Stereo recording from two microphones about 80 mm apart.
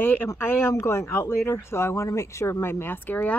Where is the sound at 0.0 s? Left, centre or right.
Left.